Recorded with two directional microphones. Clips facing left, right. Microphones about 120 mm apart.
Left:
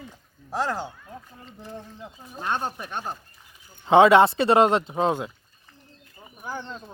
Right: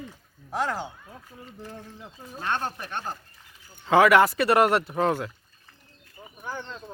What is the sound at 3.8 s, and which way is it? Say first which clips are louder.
Speech: left 3 dB; 25° left (ahead or behind).